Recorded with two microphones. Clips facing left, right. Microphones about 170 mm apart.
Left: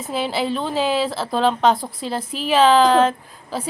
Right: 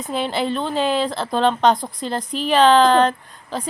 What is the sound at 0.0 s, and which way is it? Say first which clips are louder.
A woman's voice: even; 5° left (ahead or behind).